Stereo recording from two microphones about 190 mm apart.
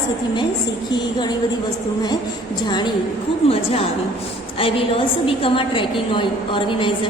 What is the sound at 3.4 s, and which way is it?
Speech, 30° left (ahead or behind).